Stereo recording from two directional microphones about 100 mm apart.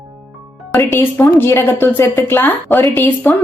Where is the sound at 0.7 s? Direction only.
25° left (ahead or behind).